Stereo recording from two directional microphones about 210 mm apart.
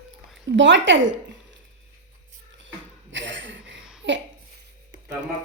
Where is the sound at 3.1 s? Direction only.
60° right (ahead or behind).